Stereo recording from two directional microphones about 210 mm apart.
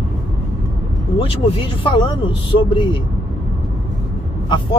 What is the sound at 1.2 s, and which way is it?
Speech, 25° left (ahead or behind).